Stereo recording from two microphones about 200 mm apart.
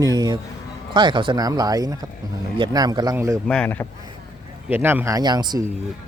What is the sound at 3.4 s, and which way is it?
Speech, 5° left (ahead or behind).